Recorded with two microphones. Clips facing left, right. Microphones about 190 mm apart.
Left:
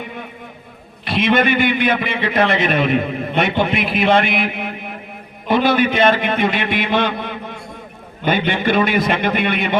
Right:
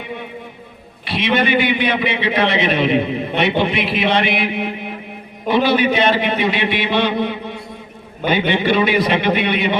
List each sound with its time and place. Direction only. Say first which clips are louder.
1.0 s a man's voice: left 2 dB; 50° left (ahead or behind)